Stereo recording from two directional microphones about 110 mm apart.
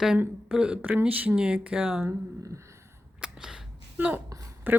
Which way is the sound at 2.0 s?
30° right (ahead or behind).